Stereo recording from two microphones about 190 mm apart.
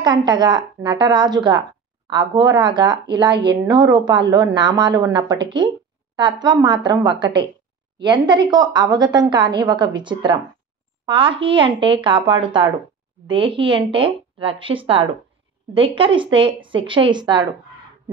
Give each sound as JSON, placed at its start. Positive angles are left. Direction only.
{"t": 0.0, "sound": "speech", "side_deg": -25}